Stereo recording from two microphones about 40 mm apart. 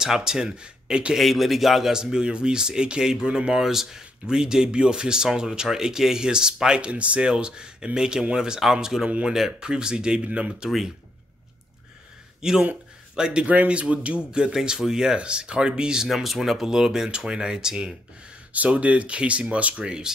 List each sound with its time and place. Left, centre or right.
0.0 s speech: centre
1.1 s speech: centre; by 10.7 s right
12.4 s a man's voice: centre
13.5 s speech: right
14.5 s speech: centre
15.1 s speech: right
16.1 s speech: centre
16.6 s speech: centre
18.5 s speech: right
19.8 s speech: centre